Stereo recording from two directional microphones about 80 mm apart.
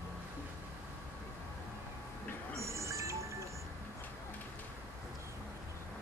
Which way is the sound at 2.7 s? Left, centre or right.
Right.